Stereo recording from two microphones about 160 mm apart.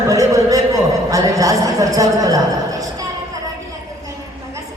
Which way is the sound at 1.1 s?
20° right (ahead or behind).